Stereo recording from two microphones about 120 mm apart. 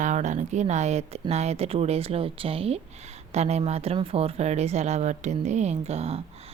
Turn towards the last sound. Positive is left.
turn(degrees=-60)  # may be behind; listen again after turning